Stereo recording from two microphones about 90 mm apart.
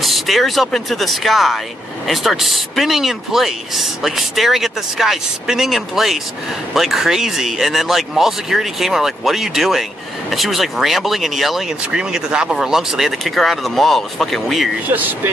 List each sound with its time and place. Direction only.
0.0 s speech: centre (ahead or behind)
14.9 s speech: 20° right (ahead or behind)